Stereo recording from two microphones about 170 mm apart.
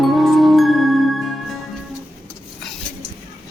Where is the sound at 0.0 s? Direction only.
Centre (ahead or behind).